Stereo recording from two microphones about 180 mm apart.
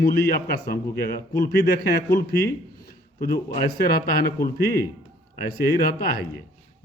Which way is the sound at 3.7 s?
60° left (ahead or behind).